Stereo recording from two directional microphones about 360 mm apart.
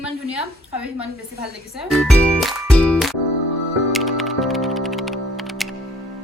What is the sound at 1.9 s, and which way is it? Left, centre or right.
Music, centre.